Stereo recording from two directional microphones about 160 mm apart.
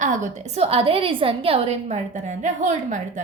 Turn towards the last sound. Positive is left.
turn(degrees=-50)  # may be behind; listen again after turning